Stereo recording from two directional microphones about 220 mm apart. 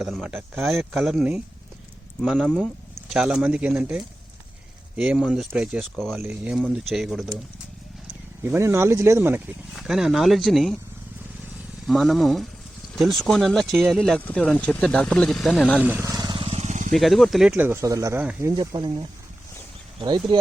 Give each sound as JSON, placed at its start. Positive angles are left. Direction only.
{"t": 0.0, "sound": "speech", "side_deg": -5}
{"t": 8.4, "sound": "speech", "side_deg": -10}
{"t": 11.9, "sound": "speech", "side_deg": 0}
{"t": 16.9, "sound": "speech", "side_deg": 0}
{"t": 18.5, "sound": "speech", "side_deg": -20}